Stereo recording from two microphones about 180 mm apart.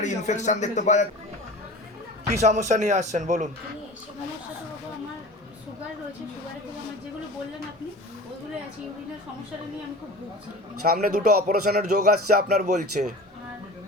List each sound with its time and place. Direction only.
0.0 s speech: 40° left (ahead or behind)
2.2 s a man's voice: 40° right (ahead or behind)
10.9 s speech: 55° right (ahead or behind)
12.6 s a man's voice: 40° right (ahead or behind)